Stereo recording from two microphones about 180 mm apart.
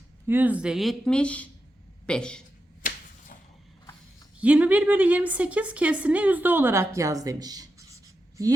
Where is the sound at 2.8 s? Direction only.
45° left (ahead or behind).